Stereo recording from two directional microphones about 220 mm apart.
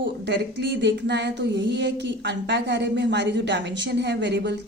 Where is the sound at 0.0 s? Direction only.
55° right (ahead or behind).